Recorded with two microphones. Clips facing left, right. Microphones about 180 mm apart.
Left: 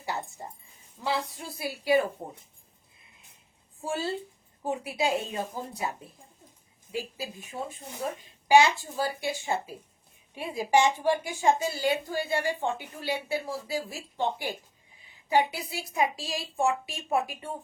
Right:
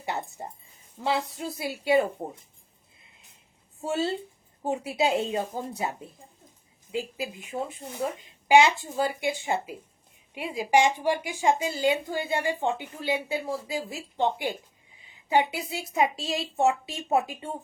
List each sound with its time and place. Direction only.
0.0 s a sound: 20° right (ahead or behind)
1.0 s a woman's voice: 20° right (ahead or behind)
3.8 s a woman's voice: 25° right (ahead or behind)